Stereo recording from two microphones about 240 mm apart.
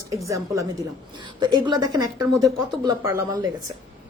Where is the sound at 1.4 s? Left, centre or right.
Centre.